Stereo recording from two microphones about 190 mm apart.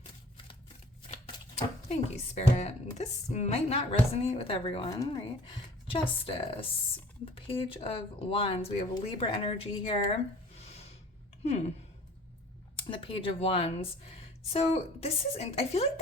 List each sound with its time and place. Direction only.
1.0 s speech: 30° left (ahead or behind)
10.6 s rub: 35° left (ahead or behind)
11.4 s a woman's voice: 35° left (ahead or behind)
12.7 s a woman's voice: 25° left (ahead or behind)